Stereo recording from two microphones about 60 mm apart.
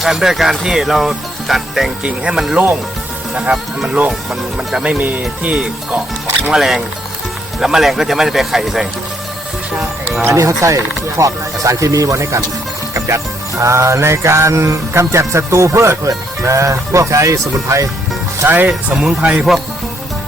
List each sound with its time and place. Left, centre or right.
0.0 s speech: centre
3.3 s speech: right
4.3 s speech: centre
4.9 s speech: right
5.5 s speech: centre
10.2 s music: right
11.2 s speech: right
12.9 s music: right
16.4 s speech: right
18.4 s speech: right
18.7 s speech: centre
19.2 s speech: right